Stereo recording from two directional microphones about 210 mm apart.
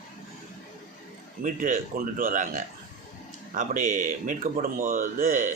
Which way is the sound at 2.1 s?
40° right (ahead or behind).